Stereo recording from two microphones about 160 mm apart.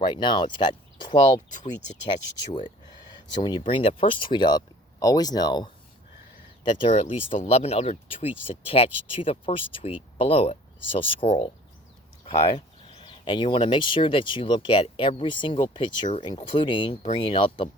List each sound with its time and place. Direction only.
0.0 s speech: 30° left (ahead or behind)
2.6 s a sound: 30° left (ahead or behind)
3.7 s speech: 35° left (ahead or behind)
6.7 s speech: 35° left (ahead or behind)
17.0 s speech: 40° left (ahead or behind)
17.2 s speech: 30° left (ahead or behind)